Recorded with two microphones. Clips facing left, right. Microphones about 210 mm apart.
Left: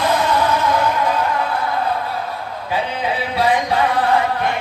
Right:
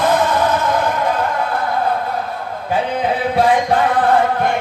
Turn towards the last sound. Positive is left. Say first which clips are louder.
# right 3 dB
turn(degrees=-50)  # may be behind; listen again after turning